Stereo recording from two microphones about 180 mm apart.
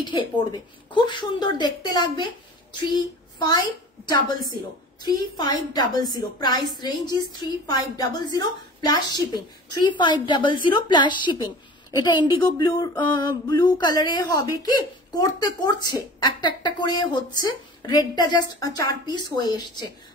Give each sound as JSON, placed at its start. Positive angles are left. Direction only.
{"t": 0.0, "sound": "a woman's voice", "side_deg": 25}
{"t": 2.9, "sound": "child singing", "side_deg": 25}
{"t": 5.0, "sound": "a woman's voice", "side_deg": 20}